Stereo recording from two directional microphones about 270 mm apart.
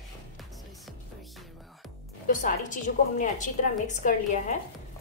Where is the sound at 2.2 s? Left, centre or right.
Left.